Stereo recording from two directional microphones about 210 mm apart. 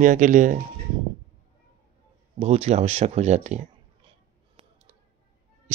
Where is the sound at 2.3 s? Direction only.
30° right (ahead or behind).